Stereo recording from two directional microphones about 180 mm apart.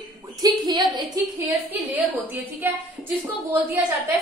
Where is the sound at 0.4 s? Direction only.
25° right (ahead or behind).